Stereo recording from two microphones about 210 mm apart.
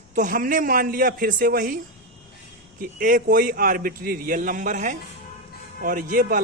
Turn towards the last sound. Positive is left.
turn(degrees=-40)  # may be behind; listen again after turning